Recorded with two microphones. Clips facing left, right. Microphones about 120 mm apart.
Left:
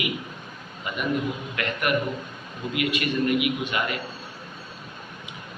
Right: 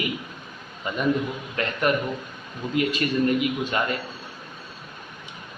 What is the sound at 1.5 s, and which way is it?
A man's voice, 30° right (ahead or behind).